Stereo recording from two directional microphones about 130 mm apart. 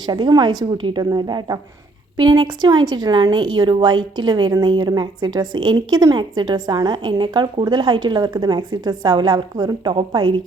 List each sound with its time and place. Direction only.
0.0 s speech: 35° right (ahead or behind)